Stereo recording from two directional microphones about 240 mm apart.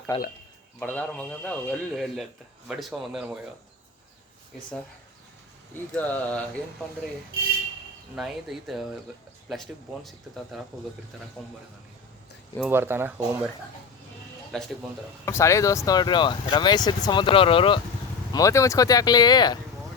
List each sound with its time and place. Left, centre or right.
0.1 s speech: left
0.8 s a man's voice: centre
5.9 s speech: centre
8.1 s a man's voice: centre
12.5 s speech: centre
15.2 s speech: centre